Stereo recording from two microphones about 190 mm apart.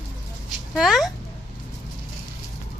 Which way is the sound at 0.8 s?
Centre (ahead or behind).